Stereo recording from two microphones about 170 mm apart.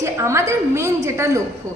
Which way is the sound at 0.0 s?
15° right (ahead or behind).